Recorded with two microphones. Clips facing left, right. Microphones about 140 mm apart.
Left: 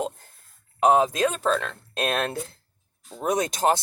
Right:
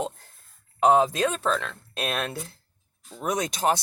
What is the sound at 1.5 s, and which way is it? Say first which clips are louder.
Speech: left 2 dB; 35° left (ahead or behind).